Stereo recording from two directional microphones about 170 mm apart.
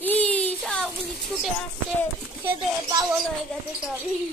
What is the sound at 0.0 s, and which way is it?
Child singing, 10° left (ahead or behind).